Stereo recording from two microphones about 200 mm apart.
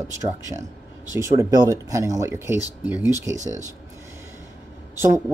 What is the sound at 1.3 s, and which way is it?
Speech, 20° right (ahead or behind).